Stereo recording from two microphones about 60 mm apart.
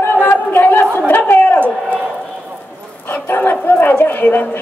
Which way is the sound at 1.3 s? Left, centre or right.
Left.